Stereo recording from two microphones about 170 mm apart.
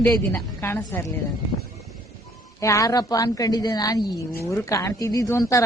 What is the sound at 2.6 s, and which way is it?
A woman's voice, 20° left (ahead or behind).